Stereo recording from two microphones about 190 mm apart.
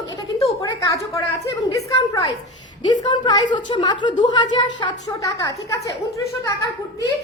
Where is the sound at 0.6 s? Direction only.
20° left (ahead or behind).